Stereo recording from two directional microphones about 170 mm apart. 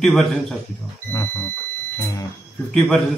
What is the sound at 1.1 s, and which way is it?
Speech, 15° left (ahead or behind).